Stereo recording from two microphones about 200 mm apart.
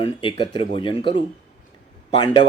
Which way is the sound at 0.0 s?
25° left (ahead or behind).